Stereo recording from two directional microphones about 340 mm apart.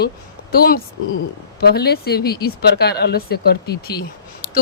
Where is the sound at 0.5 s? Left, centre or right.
Left.